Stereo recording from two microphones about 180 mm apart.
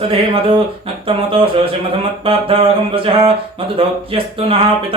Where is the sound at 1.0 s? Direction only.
30° right (ahead or behind).